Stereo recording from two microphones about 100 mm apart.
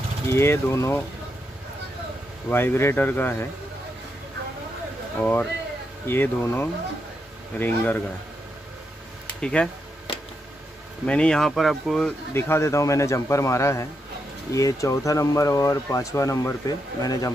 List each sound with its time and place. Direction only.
0.3 s a man's voice: 25° left (ahead or behind)
2.5 s a man's voice: 25° left (ahead or behind)
5.2 s a man's voice: 20° left (ahead or behind)
9.4 s speech: 10° left (ahead or behind)
11.1 s speech: 10° left (ahead or behind)
12.4 s a man's voice: 25° left (ahead or behind)